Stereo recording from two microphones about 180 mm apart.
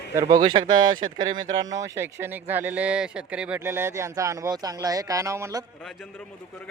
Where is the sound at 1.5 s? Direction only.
20° right (ahead or behind).